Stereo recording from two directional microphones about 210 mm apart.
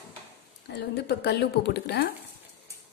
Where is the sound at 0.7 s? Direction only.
55° left (ahead or behind).